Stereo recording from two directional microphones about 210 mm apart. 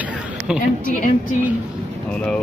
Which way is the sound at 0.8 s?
40° left (ahead or behind).